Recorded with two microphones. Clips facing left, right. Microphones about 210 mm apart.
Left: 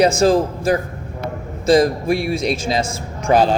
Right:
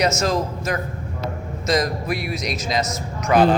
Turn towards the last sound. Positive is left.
turn(degrees=30)  # may be behind; listen again after turning